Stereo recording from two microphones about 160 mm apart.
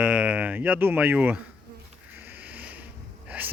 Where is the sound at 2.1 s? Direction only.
10° right (ahead or behind).